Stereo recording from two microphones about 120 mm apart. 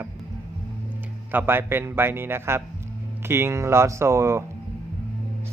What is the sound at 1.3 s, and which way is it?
Speech, 15° right (ahead or behind).